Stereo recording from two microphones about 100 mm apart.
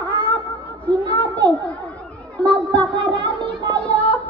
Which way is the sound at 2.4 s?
15° left (ahead or behind).